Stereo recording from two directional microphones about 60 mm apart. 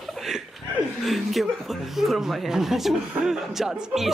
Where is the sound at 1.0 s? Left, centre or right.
Centre.